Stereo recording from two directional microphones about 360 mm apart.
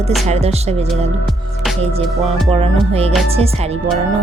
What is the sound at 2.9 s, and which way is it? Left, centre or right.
Music, centre.